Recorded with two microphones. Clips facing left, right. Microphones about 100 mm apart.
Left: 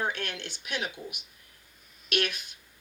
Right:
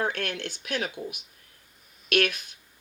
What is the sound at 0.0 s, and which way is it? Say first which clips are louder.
Speech: right 3 dB; 50° right (ahead or behind).